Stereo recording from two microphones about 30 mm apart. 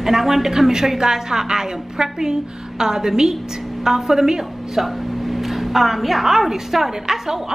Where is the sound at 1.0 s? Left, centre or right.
Right.